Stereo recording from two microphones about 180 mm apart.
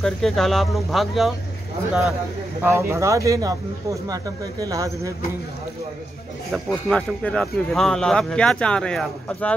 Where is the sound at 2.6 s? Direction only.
15° right (ahead or behind).